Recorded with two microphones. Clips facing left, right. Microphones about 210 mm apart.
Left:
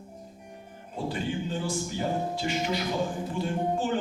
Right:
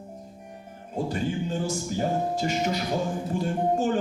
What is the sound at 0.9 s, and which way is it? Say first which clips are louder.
Music: right 3 dB; 45° right (ahead or behind).